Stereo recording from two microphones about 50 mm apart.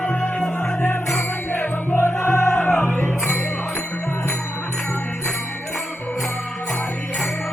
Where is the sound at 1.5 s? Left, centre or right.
Left.